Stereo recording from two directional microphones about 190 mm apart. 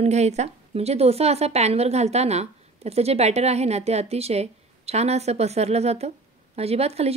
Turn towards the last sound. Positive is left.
turn(degrees=-35)  # may be behind; listen again after turning